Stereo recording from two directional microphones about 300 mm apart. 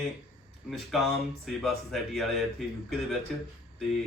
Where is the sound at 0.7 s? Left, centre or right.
Centre.